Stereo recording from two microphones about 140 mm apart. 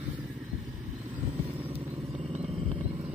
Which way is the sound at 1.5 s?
40° right (ahead or behind).